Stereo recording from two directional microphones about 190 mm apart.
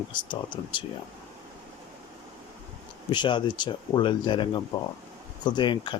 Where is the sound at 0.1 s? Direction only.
25° left (ahead or behind).